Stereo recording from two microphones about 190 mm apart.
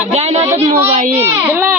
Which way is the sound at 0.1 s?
35° right (ahead or behind).